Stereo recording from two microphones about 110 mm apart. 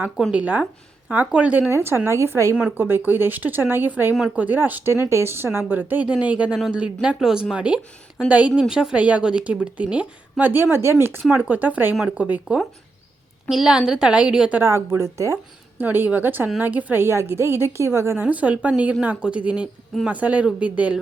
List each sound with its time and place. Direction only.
0.3 s a woman's voice: 15° right (ahead or behind)
2.6 s a woman's voice: 10° right (ahead or behind)
11.9 s a woman's voice: 5° right (ahead or behind)
14.6 s a woman's voice: 25° right (ahead or behind)